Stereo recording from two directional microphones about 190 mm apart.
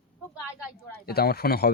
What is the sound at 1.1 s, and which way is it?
Speech, 55° left (ahead or behind).